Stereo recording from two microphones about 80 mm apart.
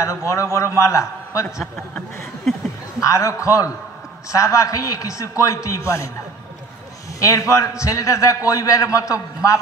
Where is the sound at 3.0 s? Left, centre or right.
Left.